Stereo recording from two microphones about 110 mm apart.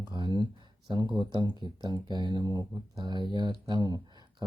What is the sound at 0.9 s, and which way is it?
Speech, 40° right (ahead or behind).